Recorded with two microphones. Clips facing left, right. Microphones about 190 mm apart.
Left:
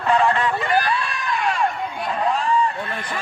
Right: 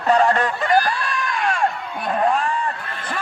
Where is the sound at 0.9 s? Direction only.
50° right (ahead or behind).